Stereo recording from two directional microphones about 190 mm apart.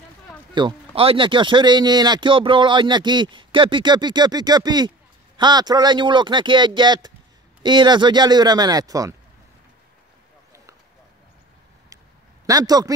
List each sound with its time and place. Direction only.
0.6 s speech: 25° right (ahead or behind)
12.4 s speech: 20° right (ahead or behind)